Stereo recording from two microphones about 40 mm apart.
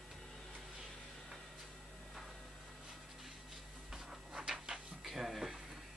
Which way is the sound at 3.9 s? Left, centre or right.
Centre.